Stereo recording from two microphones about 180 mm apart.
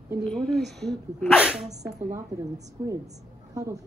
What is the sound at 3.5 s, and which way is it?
Speech, 20° right (ahead or behind).